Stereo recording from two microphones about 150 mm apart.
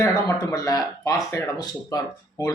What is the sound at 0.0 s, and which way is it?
Speech, 20° left (ahead or behind).